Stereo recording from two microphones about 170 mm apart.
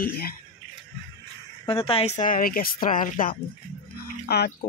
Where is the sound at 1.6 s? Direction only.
35° left (ahead or behind); by 3.4 s 50° left (ahead or behind).